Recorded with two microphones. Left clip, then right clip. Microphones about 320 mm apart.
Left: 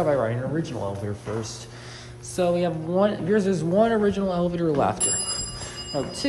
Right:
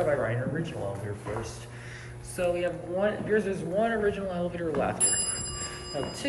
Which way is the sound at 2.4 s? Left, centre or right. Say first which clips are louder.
Left 5 dB; centre.